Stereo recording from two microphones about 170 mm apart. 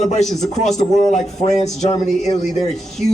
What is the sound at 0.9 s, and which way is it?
A man's voice, 45° left (ahead or behind).